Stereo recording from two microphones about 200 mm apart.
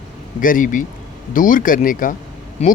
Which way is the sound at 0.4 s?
40° left (ahead or behind).